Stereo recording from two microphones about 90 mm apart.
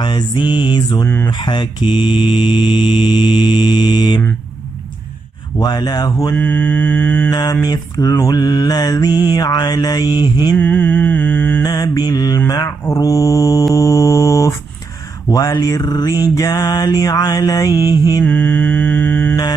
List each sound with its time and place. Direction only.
0.5 s mantra: 55° left (ahead or behind)
0.9 s mantra: 25° left (ahead or behind)
1.3 s mantra: 55° left (ahead or behind)
5.6 s mantra: 50° left (ahead or behind)
6.3 s mantra: 15° left (ahead or behind)
7.2 s mantra: 45° left (ahead or behind)
10.5 s mantra: 15° left (ahead or behind)
11.6 s mantra: 45° left (ahead or behind)
15.2 s speech: 45° left (ahead or behind)
15.6 s mantra: 45° left (ahead or behind)
18.2 s mantra: 15° left (ahead or behind)